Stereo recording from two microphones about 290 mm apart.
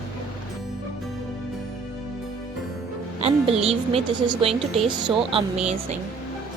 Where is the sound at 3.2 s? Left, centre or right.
Right.